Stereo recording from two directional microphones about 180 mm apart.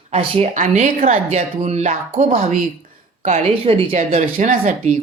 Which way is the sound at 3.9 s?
45° right (ahead or behind).